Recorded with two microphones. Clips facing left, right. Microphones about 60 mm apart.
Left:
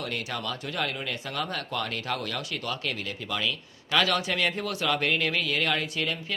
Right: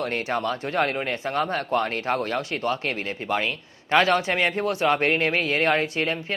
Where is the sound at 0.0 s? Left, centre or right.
Right.